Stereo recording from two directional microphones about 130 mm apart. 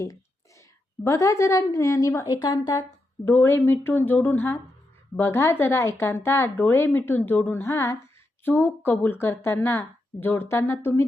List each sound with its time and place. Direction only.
1.0 s a woman's voice: 25° left (ahead or behind)
3.2 s a woman's voice: 20° left (ahead or behind)